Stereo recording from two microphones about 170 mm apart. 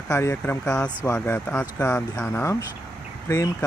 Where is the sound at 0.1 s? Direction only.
15° left (ahead or behind).